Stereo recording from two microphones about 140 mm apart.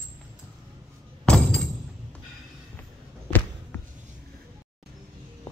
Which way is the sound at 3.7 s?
15° left (ahead or behind).